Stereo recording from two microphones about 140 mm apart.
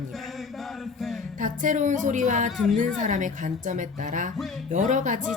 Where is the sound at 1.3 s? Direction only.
65° right (ahead or behind).